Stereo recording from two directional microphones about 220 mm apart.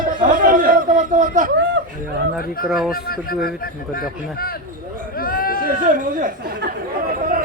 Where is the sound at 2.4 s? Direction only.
40° left (ahead or behind).